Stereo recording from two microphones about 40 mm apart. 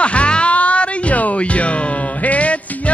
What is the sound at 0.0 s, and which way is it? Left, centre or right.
Music, left.